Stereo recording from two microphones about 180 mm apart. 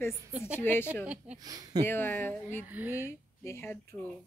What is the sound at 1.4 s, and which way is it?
Speech, 20° right (ahead or behind).